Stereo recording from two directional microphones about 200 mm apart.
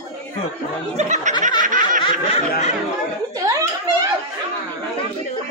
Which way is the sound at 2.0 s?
30° left (ahead or behind).